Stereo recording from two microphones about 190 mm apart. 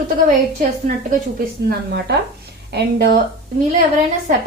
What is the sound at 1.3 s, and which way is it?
A woman's voice, 55° right (ahead or behind).